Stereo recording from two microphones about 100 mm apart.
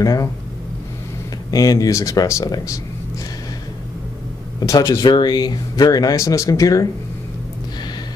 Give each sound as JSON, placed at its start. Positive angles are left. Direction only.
{"t": 0.0, "sound": "speech", "side_deg": 35}
{"t": 1.5, "sound": "speech", "side_deg": 35}
{"t": 4.6, "sound": "speech", "side_deg": 35}